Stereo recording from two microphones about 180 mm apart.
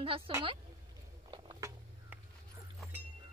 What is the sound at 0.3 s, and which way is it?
Speech, 30° right (ahead or behind).